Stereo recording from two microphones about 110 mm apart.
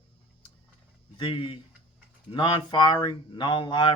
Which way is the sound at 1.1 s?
50° left (ahead or behind).